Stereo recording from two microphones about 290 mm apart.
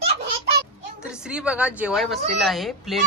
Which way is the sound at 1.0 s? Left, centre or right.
Centre.